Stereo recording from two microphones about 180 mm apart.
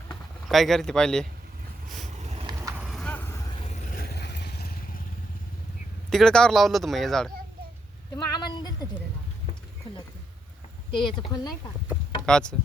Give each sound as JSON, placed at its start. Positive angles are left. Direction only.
{"t": 0.4, "sound": "speech", "side_deg": 0}
{"t": 2.5, "sound": "horse", "side_deg": -15}
{"t": 2.8, "sound": "horse", "side_deg": 0}
{"t": 3.5, "sound": "vehicle", "side_deg": 35}
{"t": 6.1, "sound": "speech", "side_deg": 0}
{"t": 8.1, "sound": "a woman's voice", "side_deg": 25}
{"t": 11.2, "sound": "a woman's voice", "side_deg": 20}
{"t": 12.2, "sound": "speech", "side_deg": 5}